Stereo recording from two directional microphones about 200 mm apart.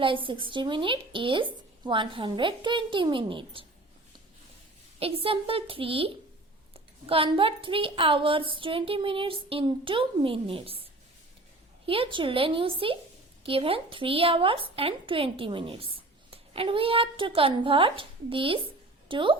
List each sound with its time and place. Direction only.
0.0 s a woman's voice: 25° right (ahead or behind)
4.9 s a woman's voice: 30° right (ahead or behind)
11.9 s a woman's voice: 25° right (ahead or behind)